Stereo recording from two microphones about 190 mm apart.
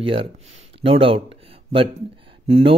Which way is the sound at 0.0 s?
30° right (ahead or behind).